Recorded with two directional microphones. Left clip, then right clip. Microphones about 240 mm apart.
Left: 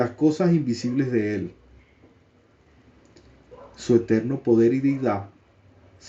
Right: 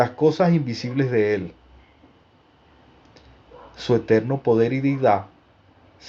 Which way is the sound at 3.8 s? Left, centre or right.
Right.